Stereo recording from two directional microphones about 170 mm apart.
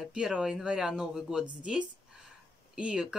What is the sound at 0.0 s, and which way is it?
Speech, 5° right (ahead or behind).